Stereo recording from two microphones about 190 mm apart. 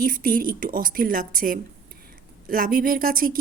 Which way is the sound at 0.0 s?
50° right (ahead or behind).